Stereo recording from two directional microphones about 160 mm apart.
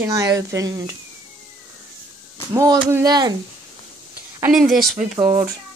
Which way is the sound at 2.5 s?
20° right (ahead or behind).